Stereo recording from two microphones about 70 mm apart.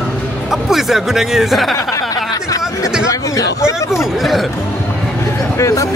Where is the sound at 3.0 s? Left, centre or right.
Left.